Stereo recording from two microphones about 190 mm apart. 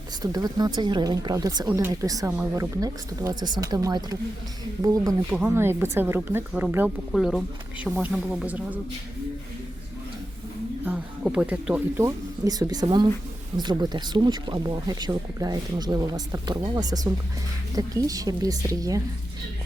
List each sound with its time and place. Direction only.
0.2 s speech: 20° right (ahead or behind)
7.1 s speech: centre (ahead or behind)
10.8 s speech: 5° right (ahead or behind)